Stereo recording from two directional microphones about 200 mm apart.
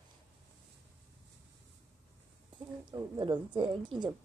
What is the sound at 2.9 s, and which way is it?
A woman's voice, 25° right (ahead or behind).